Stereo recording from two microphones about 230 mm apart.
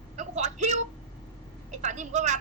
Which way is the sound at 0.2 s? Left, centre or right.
Right.